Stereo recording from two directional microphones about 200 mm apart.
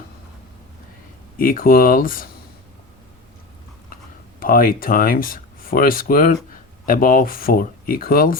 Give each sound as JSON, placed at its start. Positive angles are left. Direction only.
{"t": 1.4, "sound": "speech", "side_deg": 45}
{"t": 4.4, "sound": "speech", "side_deg": 45}